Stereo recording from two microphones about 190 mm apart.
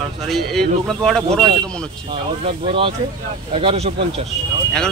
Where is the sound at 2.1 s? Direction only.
30° right (ahead or behind).